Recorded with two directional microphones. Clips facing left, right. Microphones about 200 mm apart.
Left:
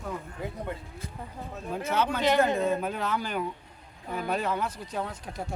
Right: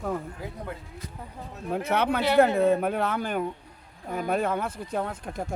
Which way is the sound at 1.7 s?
60° right (ahead or behind).